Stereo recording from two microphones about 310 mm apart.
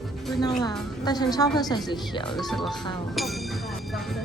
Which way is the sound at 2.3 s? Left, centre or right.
Centre.